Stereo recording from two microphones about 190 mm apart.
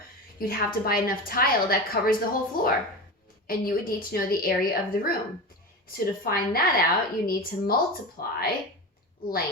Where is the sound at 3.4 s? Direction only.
50° left (ahead or behind).